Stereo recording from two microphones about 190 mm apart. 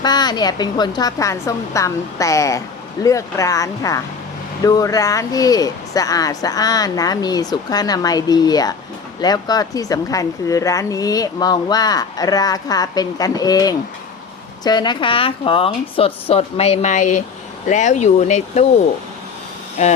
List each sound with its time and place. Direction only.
0.0 s a woman's voice: 20° left (ahead or behind); by 18.6 s 35° left (ahead or behind)
19.8 s speech: 35° left (ahead or behind)